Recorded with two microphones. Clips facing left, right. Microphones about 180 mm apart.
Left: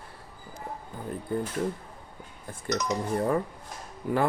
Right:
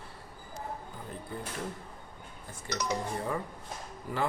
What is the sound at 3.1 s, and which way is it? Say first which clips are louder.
Speech: left 8 dB; 55° left (ahead or behind).